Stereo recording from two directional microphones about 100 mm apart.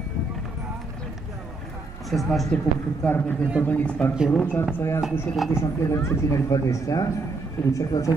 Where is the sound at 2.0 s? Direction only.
Centre (ahead or behind).